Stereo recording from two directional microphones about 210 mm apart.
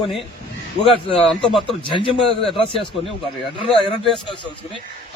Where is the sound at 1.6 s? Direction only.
25° left (ahead or behind).